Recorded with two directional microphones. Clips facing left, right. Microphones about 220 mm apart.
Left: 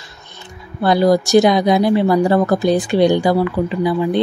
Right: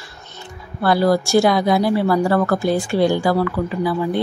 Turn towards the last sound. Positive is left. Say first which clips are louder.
# left 3 dB
turn(degrees=20)  # may be behind; listen again after turning